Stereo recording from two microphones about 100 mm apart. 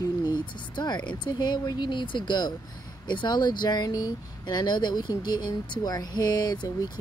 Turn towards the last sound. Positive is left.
turn(degrees=40)  # may be behind; listen again after turning